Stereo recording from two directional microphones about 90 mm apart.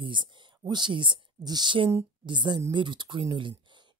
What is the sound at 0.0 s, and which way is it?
Speech, 60° right (ahead or behind).